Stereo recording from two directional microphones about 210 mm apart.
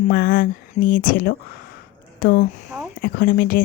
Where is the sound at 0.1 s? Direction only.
45° left (ahead or behind).